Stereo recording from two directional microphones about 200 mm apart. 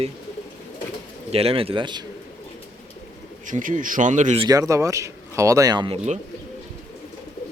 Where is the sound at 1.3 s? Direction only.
30° right (ahead or behind).